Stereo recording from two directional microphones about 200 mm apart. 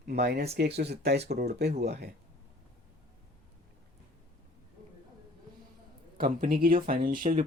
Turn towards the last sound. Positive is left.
turn(degrees=-40)  # may be behind; listen again after turning